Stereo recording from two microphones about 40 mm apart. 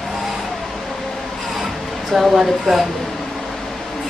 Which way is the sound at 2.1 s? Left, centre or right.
Centre.